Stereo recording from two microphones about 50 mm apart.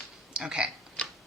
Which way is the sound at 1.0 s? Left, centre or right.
Left.